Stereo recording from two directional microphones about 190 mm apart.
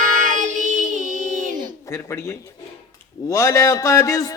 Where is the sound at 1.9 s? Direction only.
15° left (ahead or behind).